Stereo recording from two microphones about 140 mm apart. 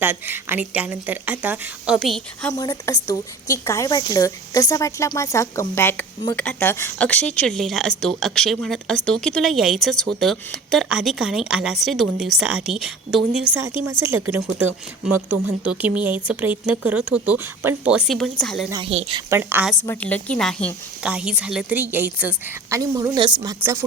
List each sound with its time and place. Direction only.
0.0 s speech: 15° right (ahead or behind)
2.5 s speech: 25° left (ahead or behind); by 18.7 s centre (ahead or behind)
18.9 s a woman's voice: 45° right (ahead or behind)
19.3 s speech: 15° right (ahead or behind)
19.8 s a woman's voice: 15° left (ahead or behind)
21.0 s speech: 5° right (ahead or behind)
22.8 s a woman's voice: 25° right (ahead or behind)